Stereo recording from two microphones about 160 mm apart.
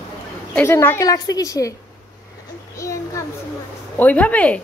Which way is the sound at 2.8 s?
20° left (ahead or behind).